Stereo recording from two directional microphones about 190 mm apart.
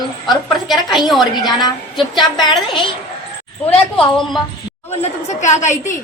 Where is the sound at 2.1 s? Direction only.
25° left (ahead or behind).